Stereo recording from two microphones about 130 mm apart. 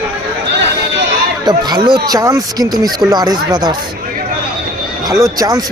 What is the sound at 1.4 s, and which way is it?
Speech, 35° right (ahead or behind).